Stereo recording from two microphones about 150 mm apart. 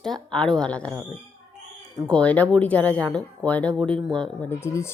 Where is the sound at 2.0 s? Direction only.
10° left (ahead or behind).